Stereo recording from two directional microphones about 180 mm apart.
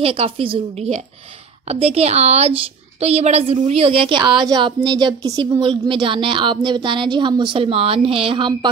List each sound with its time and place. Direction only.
0.0 s a woman's voice: 30° right (ahead or behind)